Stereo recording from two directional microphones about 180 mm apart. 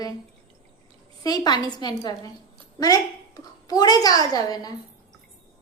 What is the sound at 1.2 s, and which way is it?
A woman's voice, 20° left (ahead or behind).